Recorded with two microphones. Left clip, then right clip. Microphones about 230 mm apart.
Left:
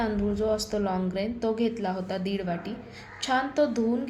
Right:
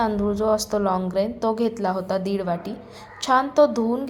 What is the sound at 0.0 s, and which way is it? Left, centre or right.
A woman's voice, centre.